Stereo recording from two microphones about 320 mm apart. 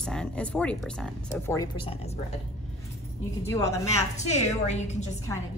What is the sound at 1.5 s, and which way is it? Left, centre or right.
Speech, centre.